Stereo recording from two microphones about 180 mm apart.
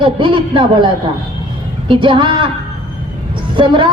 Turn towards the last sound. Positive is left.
turn(degrees=-25)  # may be behind; listen again after turning